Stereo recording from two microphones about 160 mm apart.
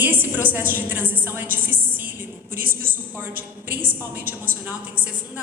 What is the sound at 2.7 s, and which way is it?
Speech, 60° right (ahead or behind).